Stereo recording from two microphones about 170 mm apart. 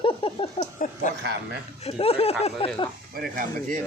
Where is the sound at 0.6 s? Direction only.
45° left (ahead or behind).